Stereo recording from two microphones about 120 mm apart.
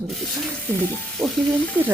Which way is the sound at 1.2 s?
5° left (ahead or behind).